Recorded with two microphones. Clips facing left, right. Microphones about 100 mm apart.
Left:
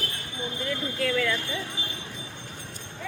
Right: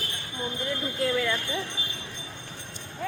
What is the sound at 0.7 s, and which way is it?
Speech, 20° right (ahead or behind).